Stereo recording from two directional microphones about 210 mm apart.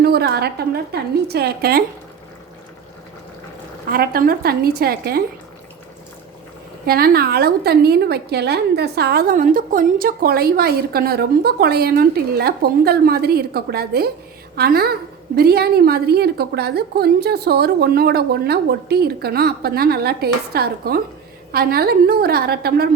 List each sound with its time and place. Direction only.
0.0 s a woman's voice: 50° right (ahead or behind)
3.8 s a woman's voice: 45° right (ahead or behind)
6.8 s a woman's voice: 45° right (ahead or behind)